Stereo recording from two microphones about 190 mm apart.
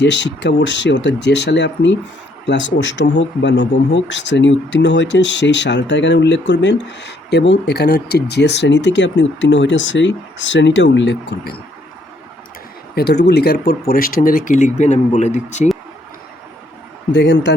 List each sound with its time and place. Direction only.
0.0 s speech: 70° left (ahead or behind)
12.9 s speech: 55° left (ahead or behind); by 15.7 s 35° left (ahead or behind)
17.1 s speech: 65° left (ahead or behind)